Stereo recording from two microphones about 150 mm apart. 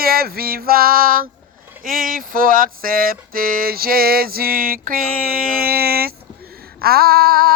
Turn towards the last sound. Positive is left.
turn(degrees=-85)